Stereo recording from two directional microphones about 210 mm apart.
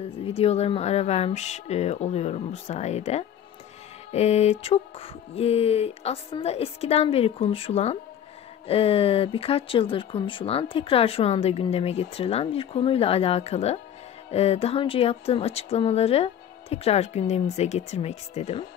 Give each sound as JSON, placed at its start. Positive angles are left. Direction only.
{"t": 0.2, "sound": "speech", "side_deg": 30}